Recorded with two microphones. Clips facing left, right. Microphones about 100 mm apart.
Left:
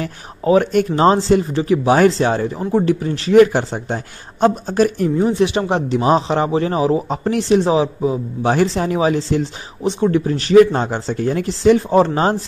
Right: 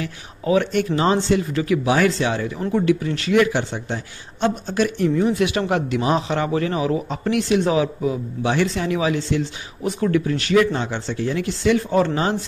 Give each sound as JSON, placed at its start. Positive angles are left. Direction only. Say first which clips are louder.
{"t": 0.0, "sound": "speech", "louder": "left 5 dB", "side_deg": 40}
{"t": 8.4, "sound": "speech", "louder": "left 6 dB", "side_deg": 40}
{"t": 9.8, "sound": "speech", "louder": "left 4 dB", "side_deg": 30}